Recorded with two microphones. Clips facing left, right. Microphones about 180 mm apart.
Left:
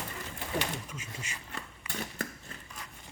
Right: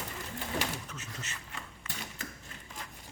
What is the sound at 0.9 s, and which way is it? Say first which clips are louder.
Door: left 1 dB; 10° left (ahead or behind).